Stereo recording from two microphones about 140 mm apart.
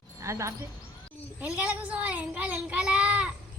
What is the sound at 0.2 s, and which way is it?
Speech, 20° right (ahead or behind).